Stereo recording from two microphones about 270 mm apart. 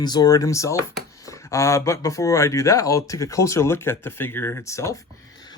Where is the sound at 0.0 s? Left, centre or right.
Centre.